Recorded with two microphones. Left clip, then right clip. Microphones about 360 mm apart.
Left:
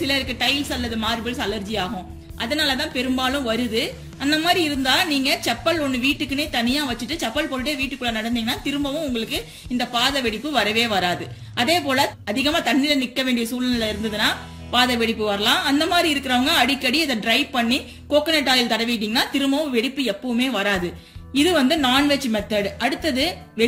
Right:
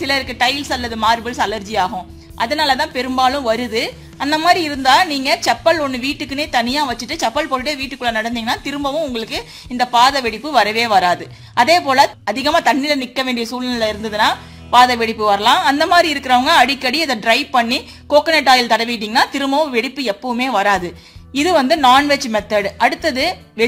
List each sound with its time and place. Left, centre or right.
0.0 s a woman's voice: centre